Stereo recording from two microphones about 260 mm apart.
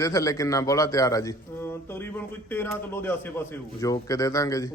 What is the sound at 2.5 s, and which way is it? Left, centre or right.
A man's voice, centre.